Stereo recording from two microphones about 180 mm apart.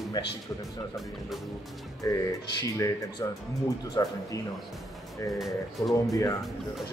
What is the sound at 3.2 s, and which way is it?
Speech, 20° left (ahead or behind).